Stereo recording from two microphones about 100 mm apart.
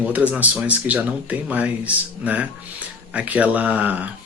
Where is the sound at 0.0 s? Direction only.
15° right (ahead or behind).